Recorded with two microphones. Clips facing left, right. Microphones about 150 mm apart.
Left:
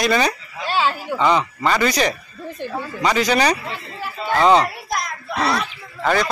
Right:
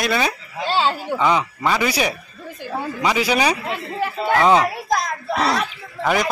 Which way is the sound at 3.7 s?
60° right (ahead or behind).